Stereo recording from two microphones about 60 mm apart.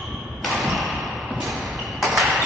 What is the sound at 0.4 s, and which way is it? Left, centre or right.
Thump, centre.